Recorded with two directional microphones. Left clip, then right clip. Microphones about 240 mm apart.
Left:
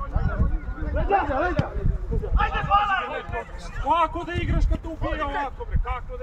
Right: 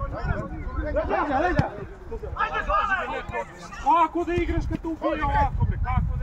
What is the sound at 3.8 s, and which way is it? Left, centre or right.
Speech, left.